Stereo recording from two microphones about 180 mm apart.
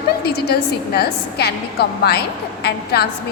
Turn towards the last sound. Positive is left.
turn(degrees=60)  # may be behind; listen again after turning